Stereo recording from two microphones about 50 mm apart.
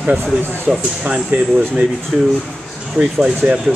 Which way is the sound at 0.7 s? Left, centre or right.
Centre.